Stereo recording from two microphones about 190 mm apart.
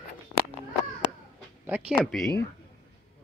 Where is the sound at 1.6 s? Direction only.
10° right (ahead or behind).